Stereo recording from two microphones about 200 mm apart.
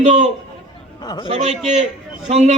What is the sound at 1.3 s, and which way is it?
A man's voice, 35° right (ahead or behind).